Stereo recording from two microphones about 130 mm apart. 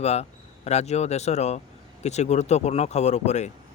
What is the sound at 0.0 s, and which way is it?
Speech, 55° left (ahead or behind).